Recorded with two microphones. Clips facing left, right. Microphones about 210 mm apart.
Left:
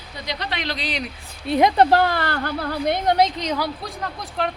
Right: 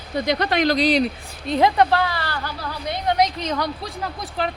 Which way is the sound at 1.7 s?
35° left (ahead or behind).